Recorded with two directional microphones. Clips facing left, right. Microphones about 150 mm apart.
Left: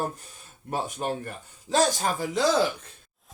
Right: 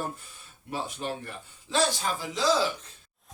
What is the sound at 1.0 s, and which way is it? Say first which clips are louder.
Speech: left 4 dB; 50° left (ahead or behind).